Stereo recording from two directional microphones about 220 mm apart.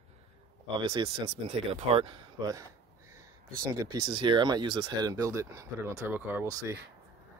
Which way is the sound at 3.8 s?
15° right (ahead or behind).